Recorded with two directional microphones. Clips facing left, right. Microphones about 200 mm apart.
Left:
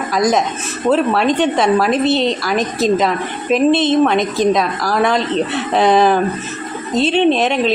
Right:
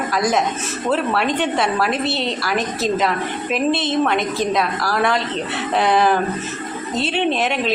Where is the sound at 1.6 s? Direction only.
20° left (ahead or behind).